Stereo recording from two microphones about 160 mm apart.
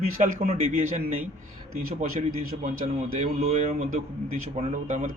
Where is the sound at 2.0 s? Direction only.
50° right (ahead or behind).